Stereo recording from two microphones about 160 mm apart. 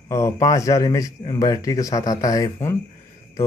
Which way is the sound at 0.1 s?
20° left (ahead or behind).